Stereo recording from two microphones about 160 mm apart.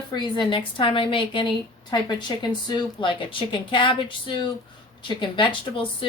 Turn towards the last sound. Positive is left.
turn(degrees=30)  # may be behind; listen again after turning